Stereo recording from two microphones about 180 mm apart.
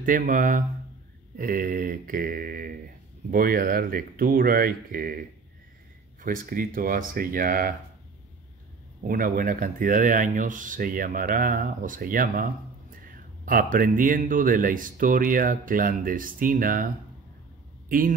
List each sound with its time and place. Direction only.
0.0 s speech: 50° right (ahead or behind)
6.2 s speech: 50° right (ahead or behind)
9.0 s speech: 50° right (ahead or behind)